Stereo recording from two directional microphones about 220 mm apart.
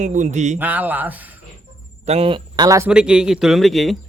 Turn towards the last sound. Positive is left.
turn(degrees=0)  # may be behind; listen again after turning